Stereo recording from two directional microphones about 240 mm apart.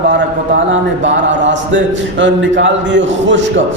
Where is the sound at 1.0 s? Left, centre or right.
Right.